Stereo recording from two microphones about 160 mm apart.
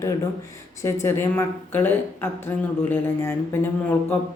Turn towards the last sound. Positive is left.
turn(degrees=10)  # may be behind; listen again after turning